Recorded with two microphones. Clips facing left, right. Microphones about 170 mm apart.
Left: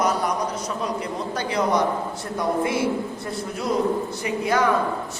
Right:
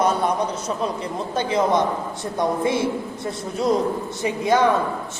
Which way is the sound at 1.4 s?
25° right (ahead or behind).